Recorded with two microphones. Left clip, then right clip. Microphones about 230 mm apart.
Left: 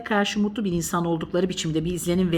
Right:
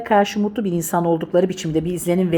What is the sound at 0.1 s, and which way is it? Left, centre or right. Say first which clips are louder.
A woman's voice: right 7 dB; centre.